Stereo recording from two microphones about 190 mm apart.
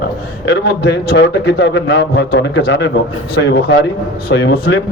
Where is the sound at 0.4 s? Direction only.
65° left (ahead or behind).